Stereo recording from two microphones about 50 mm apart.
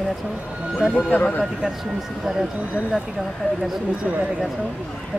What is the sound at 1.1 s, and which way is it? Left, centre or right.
Speech, left.